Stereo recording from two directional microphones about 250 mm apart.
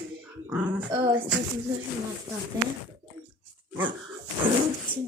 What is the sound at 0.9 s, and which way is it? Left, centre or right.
Speech, right.